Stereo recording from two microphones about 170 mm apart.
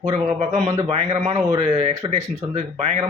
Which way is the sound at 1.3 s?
20° right (ahead or behind).